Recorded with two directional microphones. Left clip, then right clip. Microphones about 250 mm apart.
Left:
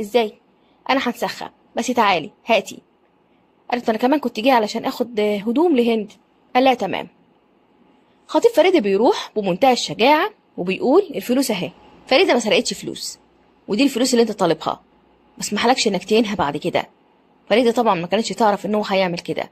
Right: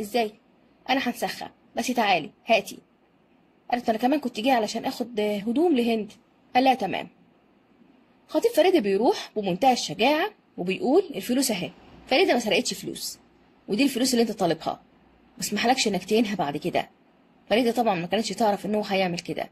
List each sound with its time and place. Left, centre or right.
0.1 s speech: centre
8.3 s speech: centre